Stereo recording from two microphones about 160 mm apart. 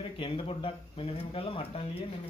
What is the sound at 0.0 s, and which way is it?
Speech, 35° left (ahead or behind).